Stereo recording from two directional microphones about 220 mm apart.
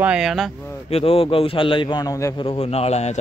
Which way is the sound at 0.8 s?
25° left (ahead or behind).